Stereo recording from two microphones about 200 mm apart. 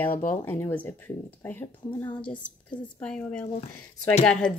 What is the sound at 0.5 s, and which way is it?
Speech, 10° left (ahead or behind).